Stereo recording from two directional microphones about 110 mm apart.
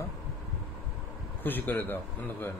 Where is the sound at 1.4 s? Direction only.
15° left (ahead or behind).